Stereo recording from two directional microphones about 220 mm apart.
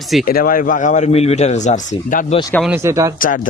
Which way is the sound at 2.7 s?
10° right (ahead or behind).